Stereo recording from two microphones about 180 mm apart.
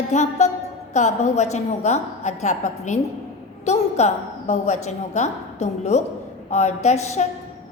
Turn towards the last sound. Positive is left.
turn(degrees=40)  # may be behind; listen again after turning